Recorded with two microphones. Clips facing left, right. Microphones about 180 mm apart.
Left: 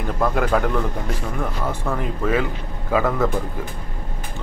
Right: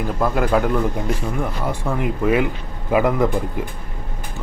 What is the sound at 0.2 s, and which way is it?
A man's voice, 5° right (ahead or behind).